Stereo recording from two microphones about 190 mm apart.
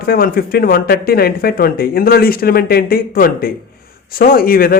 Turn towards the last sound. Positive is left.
turn(degrees=50)  # may be behind; listen again after turning